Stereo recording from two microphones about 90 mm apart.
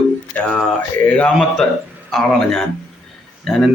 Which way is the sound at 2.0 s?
5° left (ahead or behind).